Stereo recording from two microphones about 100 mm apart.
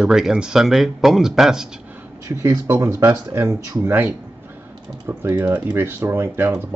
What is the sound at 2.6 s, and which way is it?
Speech, 25° right (ahead or behind).